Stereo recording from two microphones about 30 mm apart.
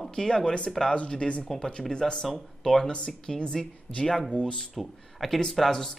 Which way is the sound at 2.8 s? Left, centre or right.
Left.